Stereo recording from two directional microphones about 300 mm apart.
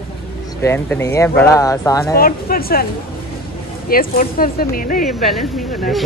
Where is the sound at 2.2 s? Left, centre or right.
Left.